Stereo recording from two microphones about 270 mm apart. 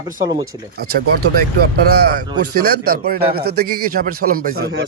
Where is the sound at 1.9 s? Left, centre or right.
Right.